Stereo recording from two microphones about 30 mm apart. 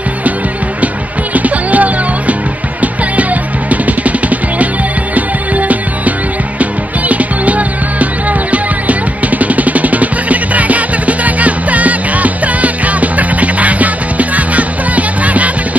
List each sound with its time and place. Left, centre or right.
1.3 s music: right